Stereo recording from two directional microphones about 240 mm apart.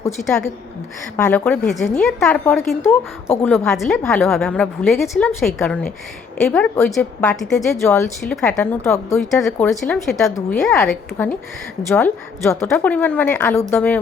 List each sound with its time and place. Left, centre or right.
0.2 s a woman's voice: centre